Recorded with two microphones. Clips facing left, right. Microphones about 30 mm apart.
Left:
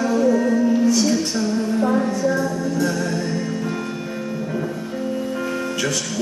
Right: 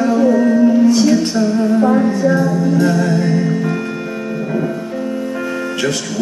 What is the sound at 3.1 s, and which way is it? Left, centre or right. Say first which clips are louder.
Music: right 8 dB; right.